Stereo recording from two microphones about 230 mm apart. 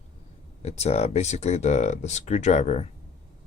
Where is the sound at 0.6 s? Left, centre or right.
Left.